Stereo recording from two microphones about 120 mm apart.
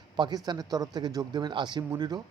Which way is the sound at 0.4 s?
35° right (ahead or behind).